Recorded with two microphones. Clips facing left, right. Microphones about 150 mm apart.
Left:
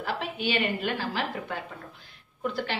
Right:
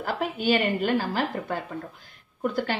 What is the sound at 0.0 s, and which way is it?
A woman's voice, 45° right (ahead or behind).